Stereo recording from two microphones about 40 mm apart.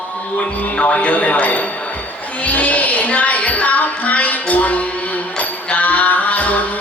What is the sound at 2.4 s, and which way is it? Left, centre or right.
Music, left.